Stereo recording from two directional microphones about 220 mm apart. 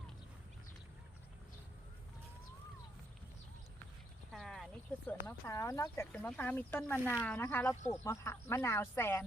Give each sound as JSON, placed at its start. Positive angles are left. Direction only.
{"t": 4.3, "sound": "speech", "side_deg": 0}